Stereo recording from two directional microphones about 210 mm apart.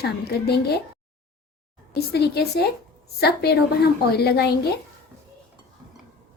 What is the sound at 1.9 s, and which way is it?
A woman's voice, 50° left (ahead or behind).